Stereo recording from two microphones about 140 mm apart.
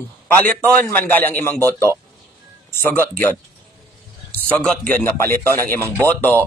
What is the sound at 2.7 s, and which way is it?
A man's voice, 15° left (ahead or behind).